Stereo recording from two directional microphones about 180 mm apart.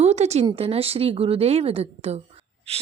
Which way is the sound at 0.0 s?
35° right (ahead or behind).